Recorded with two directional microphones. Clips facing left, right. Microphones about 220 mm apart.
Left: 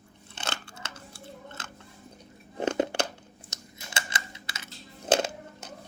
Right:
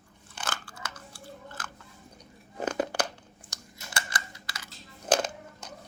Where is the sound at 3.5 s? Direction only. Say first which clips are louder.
Even; 25° left (ahead or behind).